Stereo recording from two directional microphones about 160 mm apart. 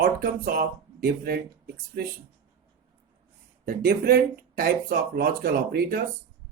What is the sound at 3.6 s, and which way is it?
Speech, 70° right (ahead or behind).